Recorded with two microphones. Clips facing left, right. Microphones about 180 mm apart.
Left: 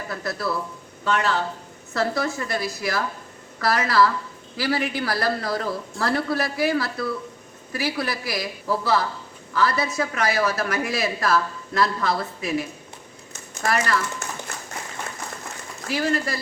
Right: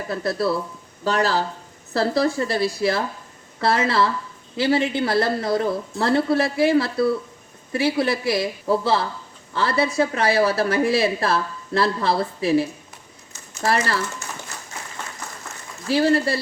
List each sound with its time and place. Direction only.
0.1 s speech: 30° right (ahead or behind)
13.7 s speech: 30° right (ahead or behind)
14.5 s applause: 60° left (ahead or behind)
15.9 s speech: 30° right (ahead or behind)